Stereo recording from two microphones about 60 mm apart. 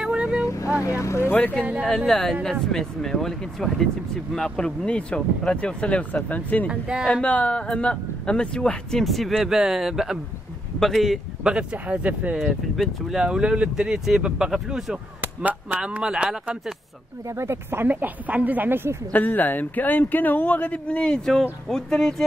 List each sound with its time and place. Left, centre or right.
0.0 s vehicle: centre
0.8 s speech: left
1.3 s speech: left
1.9 s speech: centre; by 6.7 s left
6.7 s speech: centre
7.1 s speech: centre
9.0 s speech: centre
11.4 s speech: centre
12.4 s speech: centre
13.1 s speech: centre
17.3 s speech: right
19.1 s speech: left; by 22.1 s centre